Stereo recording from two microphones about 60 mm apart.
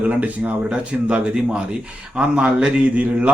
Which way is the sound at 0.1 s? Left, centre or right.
Right.